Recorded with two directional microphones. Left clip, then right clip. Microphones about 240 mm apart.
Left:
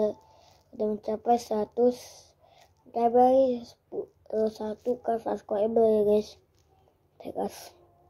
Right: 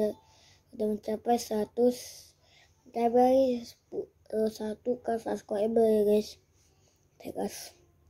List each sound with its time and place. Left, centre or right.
0.0 s a woman's voice: right
3.9 s a sound: right
4.5 s speech: right